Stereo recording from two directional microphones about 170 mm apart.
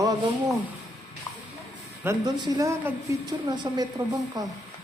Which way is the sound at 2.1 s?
20° right (ahead or behind).